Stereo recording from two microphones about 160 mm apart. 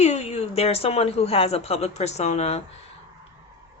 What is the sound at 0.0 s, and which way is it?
A woman's voice, 45° left (ahead or behind).